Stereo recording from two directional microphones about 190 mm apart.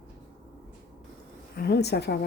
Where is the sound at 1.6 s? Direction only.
60° left (ahead or behind).